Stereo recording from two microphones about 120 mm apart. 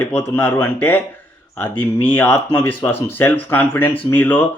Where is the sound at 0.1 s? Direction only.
10° left (ahead or behind).